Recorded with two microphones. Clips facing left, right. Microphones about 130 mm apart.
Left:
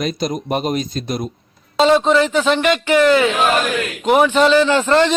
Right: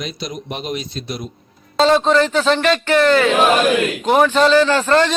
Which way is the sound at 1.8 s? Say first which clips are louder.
Left 1 dB; 10° left (ahead or behind).